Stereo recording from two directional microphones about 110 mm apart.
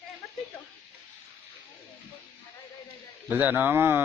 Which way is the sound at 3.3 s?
15° right (ahead or behind).